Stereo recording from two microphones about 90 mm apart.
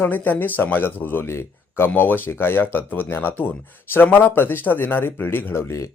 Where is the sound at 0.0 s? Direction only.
20° left (ahead or behind).